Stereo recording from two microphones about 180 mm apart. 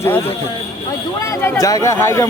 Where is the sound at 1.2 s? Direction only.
15° left (ahead or behind).